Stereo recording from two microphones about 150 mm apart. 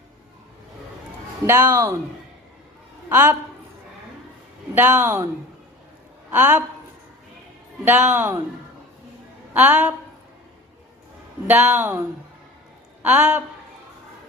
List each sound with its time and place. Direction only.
1.5 s speech: 15° right (ahead or behind)
3.1 s speech: 10° right (ahead or behind)
4.7 s speech: 10° right (ahead or behind)
6.3 s speech: 10° right (ahead or behind)
7.9 s speech: 10° right (ahead or behind)
9.5 s speech: 10° right (ahead or behind)
11.4 s a woman's voice: 10° right (ahead or behind)